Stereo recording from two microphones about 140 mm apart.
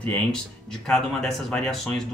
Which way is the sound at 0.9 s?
Centre (ahead or behind).